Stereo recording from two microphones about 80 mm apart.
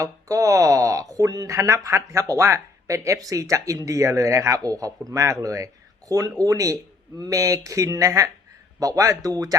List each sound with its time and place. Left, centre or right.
0.0 s speech: right